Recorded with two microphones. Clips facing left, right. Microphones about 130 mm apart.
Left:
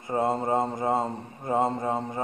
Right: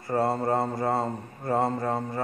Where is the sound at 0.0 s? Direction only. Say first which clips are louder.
Right 1 dB; 15° left (ahead or behind).